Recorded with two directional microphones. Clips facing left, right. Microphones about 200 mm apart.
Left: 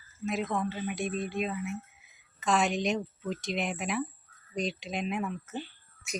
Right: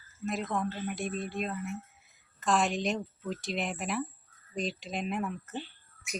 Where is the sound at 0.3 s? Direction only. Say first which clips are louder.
Left 1 dB; centre (ahead or behind).